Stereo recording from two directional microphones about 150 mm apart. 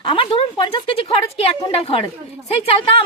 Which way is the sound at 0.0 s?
35° left (ahead or behind).